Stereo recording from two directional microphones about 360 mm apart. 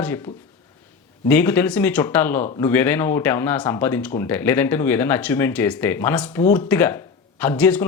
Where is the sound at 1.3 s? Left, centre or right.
Centre.